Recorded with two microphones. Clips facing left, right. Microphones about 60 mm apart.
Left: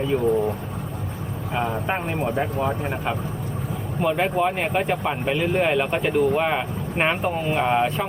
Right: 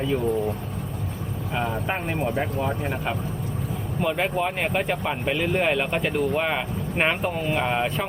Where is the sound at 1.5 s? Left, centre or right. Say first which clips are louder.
Left 2 dB; centre.